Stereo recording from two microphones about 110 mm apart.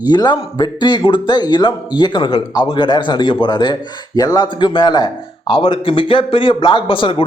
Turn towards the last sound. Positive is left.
turn(degrees=50)  # may be behind; listen again after turning